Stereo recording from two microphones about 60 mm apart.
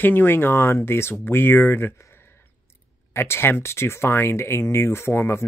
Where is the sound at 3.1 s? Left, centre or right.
Left.